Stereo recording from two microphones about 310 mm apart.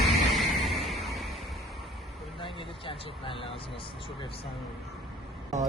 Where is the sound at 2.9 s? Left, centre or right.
Centre.